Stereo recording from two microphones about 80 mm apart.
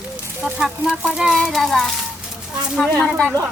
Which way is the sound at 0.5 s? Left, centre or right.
Centre.